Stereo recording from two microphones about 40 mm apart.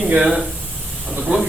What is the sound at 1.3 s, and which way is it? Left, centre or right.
Speech, right.